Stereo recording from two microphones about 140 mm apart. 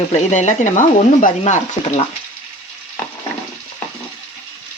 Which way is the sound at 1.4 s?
50° left (ahead or behind).